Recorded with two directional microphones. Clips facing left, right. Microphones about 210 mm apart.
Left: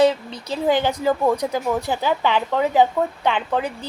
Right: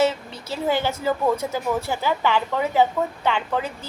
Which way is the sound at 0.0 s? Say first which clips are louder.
Left 4 dB; 15° left (ahead or behind).